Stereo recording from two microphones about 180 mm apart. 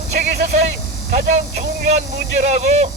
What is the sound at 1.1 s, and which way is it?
Speech, 40° right (ahead or behind).